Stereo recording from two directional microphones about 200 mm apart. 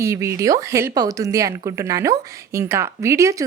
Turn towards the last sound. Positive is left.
turn(degrees=-15)  # may be behind; listen again after turning